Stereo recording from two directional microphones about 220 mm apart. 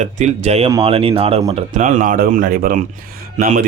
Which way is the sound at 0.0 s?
30° right (ahead or behind).